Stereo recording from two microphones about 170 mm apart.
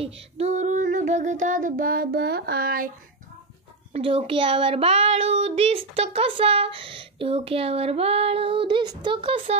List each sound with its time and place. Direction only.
0.0 s child singing: 40° right (ahead or behind); by 2.9 s 60° right (ahead or behind)
3.9 s child singing: 35° right (ahead or behind)